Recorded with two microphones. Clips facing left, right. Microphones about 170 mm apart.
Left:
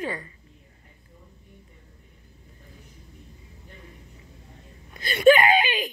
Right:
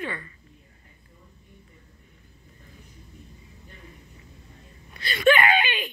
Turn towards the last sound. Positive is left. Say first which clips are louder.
# left 2 dB
turn(degrees=40)  # may be behind; listen again after turning